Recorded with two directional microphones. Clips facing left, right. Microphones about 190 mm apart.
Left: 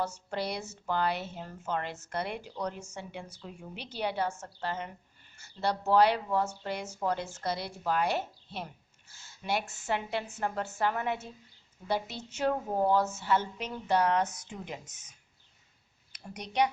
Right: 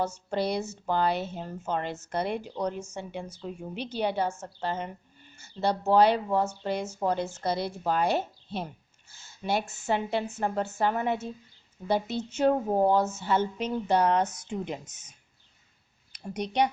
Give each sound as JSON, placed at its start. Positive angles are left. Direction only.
{"t": 0.0, "sound": "speech", "side_deg": -25}
{"t": 16.1, "sound": "speech", "side_deg": -30}